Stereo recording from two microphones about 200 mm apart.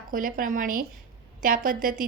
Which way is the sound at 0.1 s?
45° right (ahead or behind).